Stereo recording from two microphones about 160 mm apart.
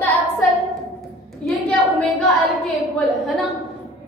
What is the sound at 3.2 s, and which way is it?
Speech, centre (ahead or behind).